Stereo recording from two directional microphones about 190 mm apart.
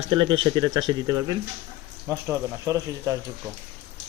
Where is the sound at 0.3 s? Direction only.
25° right (ahead or behind).